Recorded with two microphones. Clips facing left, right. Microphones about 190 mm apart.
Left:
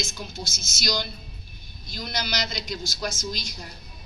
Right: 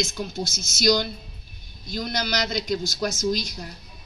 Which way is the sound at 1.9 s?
50° right (ahead or behind).